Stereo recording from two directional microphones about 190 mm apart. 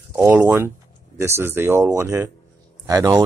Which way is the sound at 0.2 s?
10° right (ahead or behind).